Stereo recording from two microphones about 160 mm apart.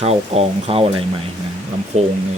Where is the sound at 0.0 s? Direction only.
40° right (ahead or behind).